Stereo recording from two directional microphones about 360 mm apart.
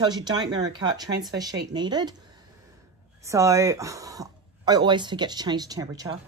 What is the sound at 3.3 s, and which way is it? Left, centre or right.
A woman's voice, centre.